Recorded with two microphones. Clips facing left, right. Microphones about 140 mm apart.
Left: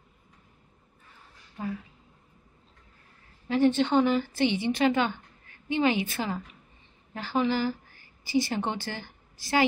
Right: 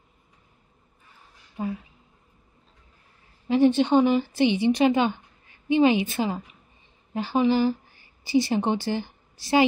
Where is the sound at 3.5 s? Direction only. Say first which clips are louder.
Right 4 dB; 15° right (ahead or behind).